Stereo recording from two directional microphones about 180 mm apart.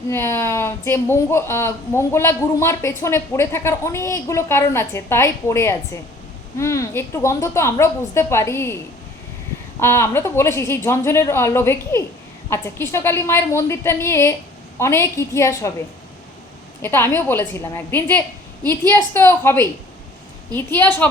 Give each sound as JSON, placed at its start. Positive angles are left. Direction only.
{"t": 0.1, "sound": "speech", "side_deg": 15}
{"t": 9.8, "sound": "speech", "side_deg": 15}
{"t": 16.8, "sound": "speech", "side_deg": 15}